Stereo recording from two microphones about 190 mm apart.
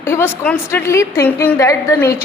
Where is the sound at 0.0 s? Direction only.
10° left (ahead or behind).